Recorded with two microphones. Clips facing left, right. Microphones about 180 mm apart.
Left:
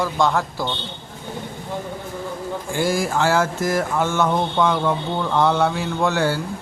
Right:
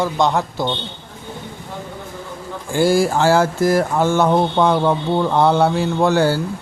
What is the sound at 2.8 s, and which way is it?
Speech, 30° right (ahead or behind).